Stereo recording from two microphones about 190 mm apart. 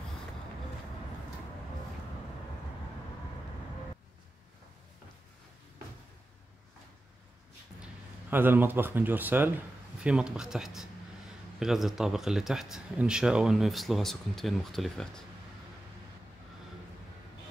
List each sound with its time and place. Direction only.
7.8 s speech: 10° right (ahead or behind)